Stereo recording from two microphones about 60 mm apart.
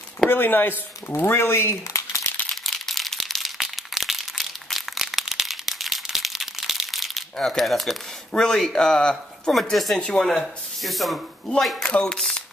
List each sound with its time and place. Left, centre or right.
0.3 s speech: left
2.5 s a sound: centre
7.3 s speech: centre
9.5 s speech: centre
10.3 s speech: centre
11.9 s speech: centre